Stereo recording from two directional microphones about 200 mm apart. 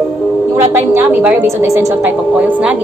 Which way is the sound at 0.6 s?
10° right (ahead or behind).